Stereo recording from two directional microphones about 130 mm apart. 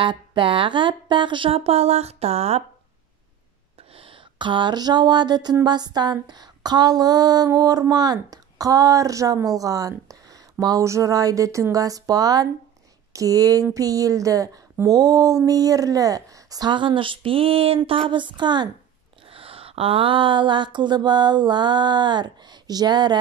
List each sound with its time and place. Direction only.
0.0 s speech: 40° right (ahead or behind); by 2.6 s 55° right (ahead or behind)
3.9 s a sound: 45° right (ahead or behind)
18.1 s speech: 35° right (ahead or behind)
19.2 s speech: 45° right (ahead or behind)